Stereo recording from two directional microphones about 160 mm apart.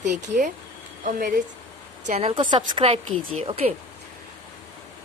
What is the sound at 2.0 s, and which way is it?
Speech, 40° right (ahead or behind).